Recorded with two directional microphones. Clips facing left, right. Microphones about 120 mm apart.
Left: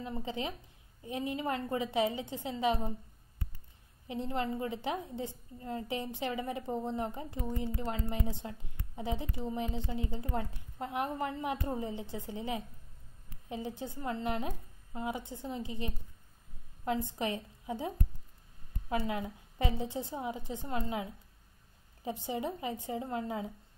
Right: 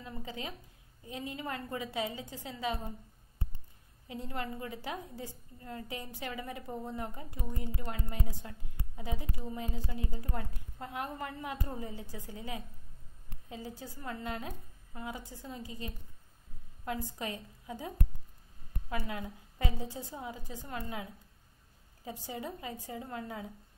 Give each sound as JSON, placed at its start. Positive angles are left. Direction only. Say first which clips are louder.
{"t": 0.0, "sound": "a woman's voice", "louder": "left 5 dB", "side_deg": 25}
{"t": 4.1, "sound": "a woman's voice", "louder": "left 5 dB", "side_deg": 25}